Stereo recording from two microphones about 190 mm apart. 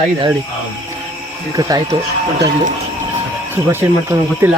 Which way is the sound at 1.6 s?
20° right (ahead or behind).